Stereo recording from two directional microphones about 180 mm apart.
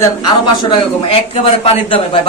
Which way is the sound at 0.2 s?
25° left (ahead or behind).